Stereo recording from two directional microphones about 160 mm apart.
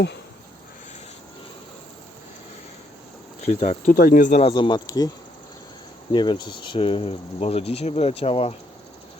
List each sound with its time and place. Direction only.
3.6 s speech: 55° left (ahead or behind)
4.4 s speech: 30° left (ahead or behind)